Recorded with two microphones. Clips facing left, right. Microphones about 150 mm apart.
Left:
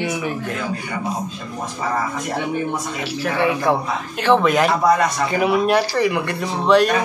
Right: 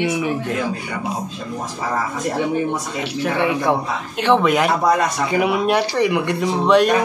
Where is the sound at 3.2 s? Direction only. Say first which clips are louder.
Even; 20° right (ahead or behind).